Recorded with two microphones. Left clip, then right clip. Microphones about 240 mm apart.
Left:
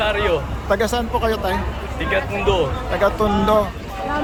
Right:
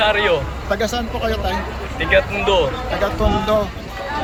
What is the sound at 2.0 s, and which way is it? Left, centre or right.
Speech, centre.